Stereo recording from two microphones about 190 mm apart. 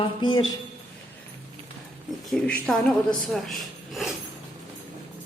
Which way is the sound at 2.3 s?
5° left (ahead or behind).